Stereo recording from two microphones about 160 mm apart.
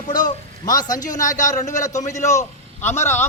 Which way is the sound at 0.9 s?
55° left (ahead or behind).